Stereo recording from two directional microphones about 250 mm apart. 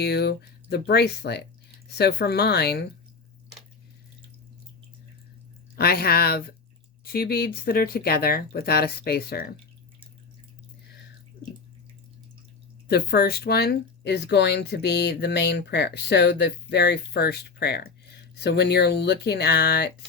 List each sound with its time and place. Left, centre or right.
0.0 s speech: left
5.7 s speech: left
12.9 s speech: left